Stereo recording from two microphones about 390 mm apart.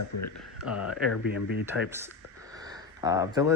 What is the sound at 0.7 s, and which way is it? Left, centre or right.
Speech, left.